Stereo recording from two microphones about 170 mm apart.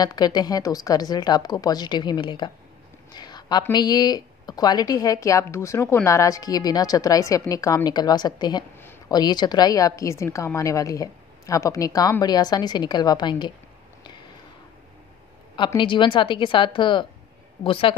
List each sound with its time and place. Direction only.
0.0 s speech: 25° left (ahead or behind)
14.0 s a sound: 25° left (ahead or behind)
15.5 s a woman's voice: 30° left (ahead or behind)